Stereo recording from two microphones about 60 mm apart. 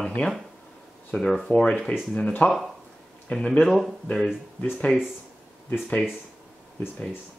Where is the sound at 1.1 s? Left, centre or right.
Centre.